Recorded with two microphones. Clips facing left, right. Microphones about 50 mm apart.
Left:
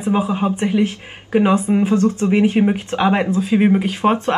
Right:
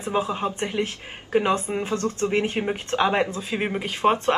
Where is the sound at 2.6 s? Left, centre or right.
Centre.